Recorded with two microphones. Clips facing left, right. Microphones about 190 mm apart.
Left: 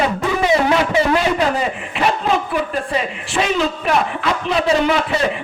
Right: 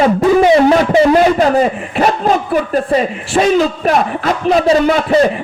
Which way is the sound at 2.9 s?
45° right (ahead or behind).